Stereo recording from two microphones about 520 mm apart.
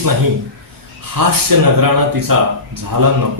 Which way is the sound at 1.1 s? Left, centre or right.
Right.